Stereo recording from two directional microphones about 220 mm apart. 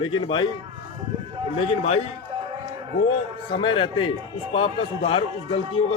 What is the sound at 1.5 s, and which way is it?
Speech, 30° left (ahead or behind).